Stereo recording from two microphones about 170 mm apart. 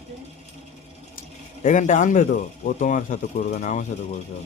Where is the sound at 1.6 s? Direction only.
45° left (ahead or behind).